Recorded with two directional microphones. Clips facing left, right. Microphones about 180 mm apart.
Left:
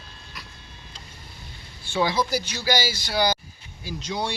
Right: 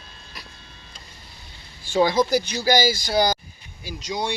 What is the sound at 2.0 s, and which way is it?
Speech, 45° right (ahead or behind).